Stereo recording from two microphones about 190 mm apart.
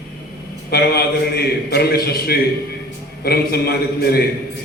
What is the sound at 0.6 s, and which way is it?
A man's voice, 55° left (ahead or behind).